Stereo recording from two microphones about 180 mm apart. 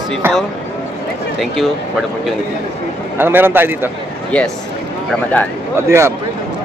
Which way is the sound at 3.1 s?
10° right (ahead or behind).